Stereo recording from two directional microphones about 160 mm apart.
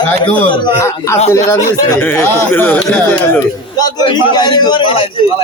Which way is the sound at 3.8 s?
25° left (ahead or behind).